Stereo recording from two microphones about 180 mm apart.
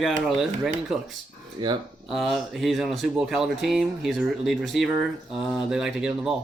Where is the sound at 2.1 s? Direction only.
Centre (ahead or behind).